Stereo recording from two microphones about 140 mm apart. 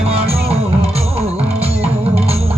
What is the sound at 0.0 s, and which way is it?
Music, 45° right (ahead or behind).